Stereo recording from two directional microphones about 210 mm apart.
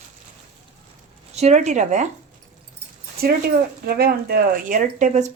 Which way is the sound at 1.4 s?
35° right (ahead or behind).